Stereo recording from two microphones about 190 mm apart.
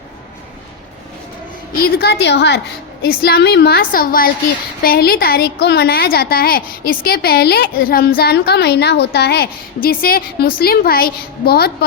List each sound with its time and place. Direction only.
1.7 s a woman's voice: 50° left (ahead or behind)